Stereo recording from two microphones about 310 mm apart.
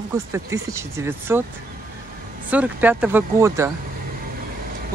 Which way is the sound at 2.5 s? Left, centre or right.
Centre.